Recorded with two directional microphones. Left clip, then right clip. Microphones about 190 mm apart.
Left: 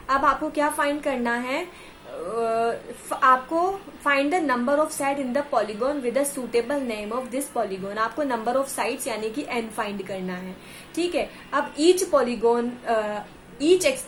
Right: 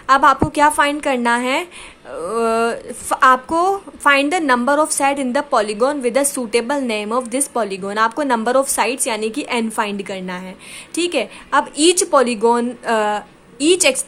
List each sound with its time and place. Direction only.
0.1 s a woman's voice: 45° right (ahead or behind)